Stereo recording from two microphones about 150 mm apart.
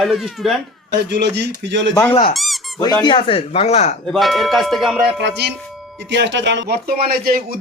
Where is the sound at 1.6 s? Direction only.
90° right.